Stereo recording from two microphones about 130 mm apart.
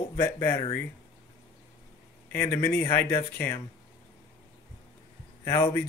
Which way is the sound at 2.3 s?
15° left (ahead or behind).